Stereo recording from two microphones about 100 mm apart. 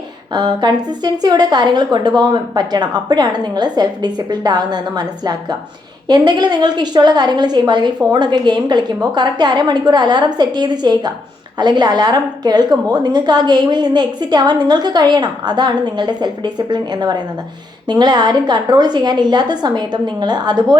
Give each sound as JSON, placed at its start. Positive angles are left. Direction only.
{"t": 0.3, "sound": "a woman's voice", "side_deg": -45}